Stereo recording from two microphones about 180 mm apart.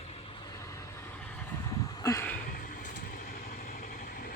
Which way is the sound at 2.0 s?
20° left (ahead or behind).